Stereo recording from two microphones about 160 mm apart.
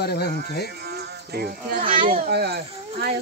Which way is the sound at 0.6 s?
90° right.